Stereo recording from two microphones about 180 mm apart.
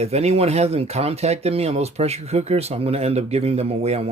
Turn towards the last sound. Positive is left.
turn(degrees=-35)  # may be behind; listen again after turning